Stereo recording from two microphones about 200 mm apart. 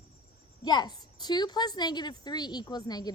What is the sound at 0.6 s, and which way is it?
A woman's voice, 20° left (ahead or behind).